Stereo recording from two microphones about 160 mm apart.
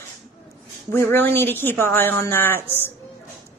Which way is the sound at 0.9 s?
15° left (ahead or behind).